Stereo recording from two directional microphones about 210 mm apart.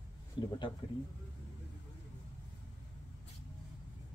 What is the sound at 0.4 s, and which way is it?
Speech, 20° left (ahead or behind).